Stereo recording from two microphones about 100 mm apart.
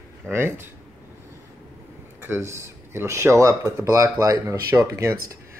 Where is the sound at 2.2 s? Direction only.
25° right (ahead or behind).